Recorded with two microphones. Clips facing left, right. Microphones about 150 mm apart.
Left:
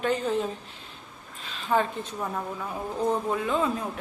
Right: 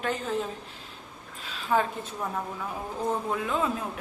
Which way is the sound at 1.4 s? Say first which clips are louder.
Left 1 dB; 5° right (ahead or behind).